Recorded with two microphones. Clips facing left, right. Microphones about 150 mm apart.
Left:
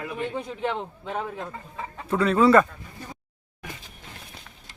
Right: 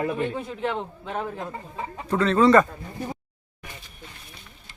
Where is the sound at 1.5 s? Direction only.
15° right (ahead or behind).